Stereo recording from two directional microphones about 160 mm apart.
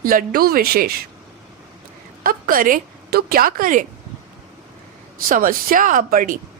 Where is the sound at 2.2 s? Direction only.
60° right (ahead or behind).